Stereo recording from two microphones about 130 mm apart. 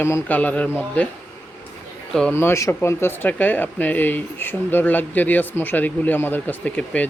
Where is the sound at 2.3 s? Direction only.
20° left (ahead or behind).